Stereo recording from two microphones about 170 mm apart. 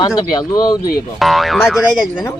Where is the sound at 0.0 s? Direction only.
25° left (ahead or behind).